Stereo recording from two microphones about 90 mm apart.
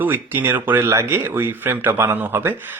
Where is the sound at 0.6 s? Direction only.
20° right (ahead or behind).